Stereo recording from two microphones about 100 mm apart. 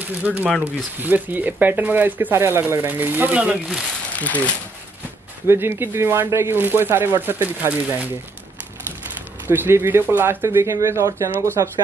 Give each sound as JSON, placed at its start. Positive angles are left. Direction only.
{"t": 0.2, "sound": "speech", "side_deg": -15}
{"t": 4.1, "sound": "speech", "side_deg": 15}
{"t": 5.5, "sound": "speech", "side_deg": -25}
{"t": 9.5, "sound": "speech", "side_deg": -25}